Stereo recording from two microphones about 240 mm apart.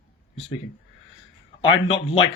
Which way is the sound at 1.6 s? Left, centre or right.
Left.